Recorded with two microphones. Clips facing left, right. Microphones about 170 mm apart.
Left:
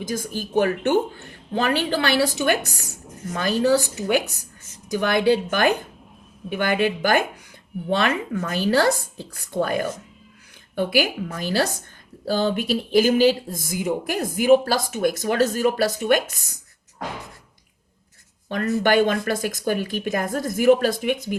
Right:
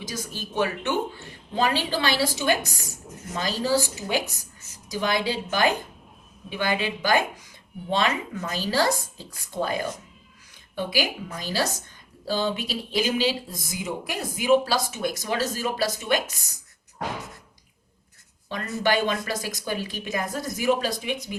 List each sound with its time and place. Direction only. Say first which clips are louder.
0.0 s a woman's voice: left 7 dB; 50° left (ahead or behind)
4.9 s a woman's voice: left 7 dB; 55° left (ahead or behind)
18.4 s speech: left 5 dB; 50° left (ahead or behind)